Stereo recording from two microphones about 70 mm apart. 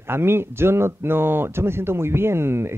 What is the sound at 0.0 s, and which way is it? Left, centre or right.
Speech, right.